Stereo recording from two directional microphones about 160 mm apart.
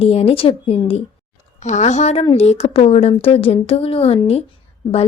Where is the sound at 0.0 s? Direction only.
40° left (ahead or behind).